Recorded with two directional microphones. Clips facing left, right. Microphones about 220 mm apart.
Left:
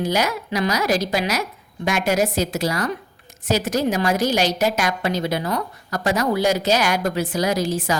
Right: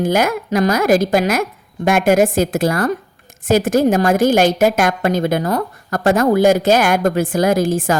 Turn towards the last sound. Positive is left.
turn(degrees=-50)  # may be behind; listen again after turning